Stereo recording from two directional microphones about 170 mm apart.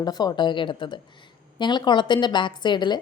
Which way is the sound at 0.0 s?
25° left (ahead or behind).